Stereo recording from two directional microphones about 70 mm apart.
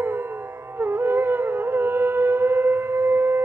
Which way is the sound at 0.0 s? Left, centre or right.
Right.